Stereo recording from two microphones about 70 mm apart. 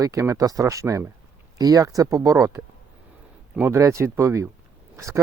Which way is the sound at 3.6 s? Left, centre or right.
Right.